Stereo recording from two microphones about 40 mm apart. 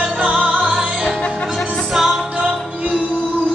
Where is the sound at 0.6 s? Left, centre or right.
Centre.